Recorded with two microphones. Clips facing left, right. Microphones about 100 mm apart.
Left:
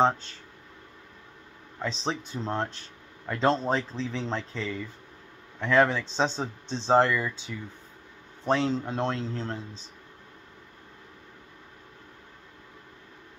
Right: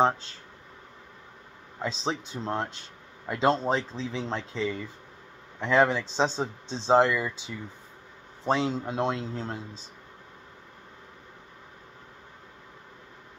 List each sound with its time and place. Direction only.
1.8 s speech: 5° right (ahead or behind)